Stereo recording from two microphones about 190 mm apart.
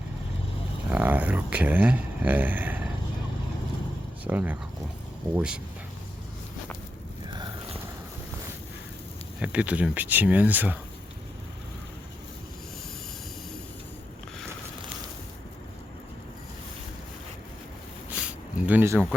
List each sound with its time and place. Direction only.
0.9 s speech: 10° right (ahead or behind)
4.2 s speech: 10° right (ahead or behind)
7.3 s a sound: 25° right (ahead or behind)
9.4 s speech: 5° right (ahead or behind)
18.6 s speech: 10° right (ahead or behind)